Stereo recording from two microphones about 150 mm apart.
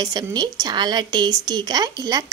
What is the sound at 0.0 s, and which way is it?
A woman's voice, 25° right (ahead or behind).